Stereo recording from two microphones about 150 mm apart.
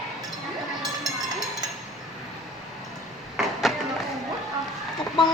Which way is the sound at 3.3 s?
Centre (ahead or behind).